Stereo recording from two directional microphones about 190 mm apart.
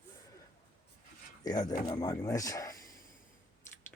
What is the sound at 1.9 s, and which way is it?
Speech, 20° left (ahead or behind).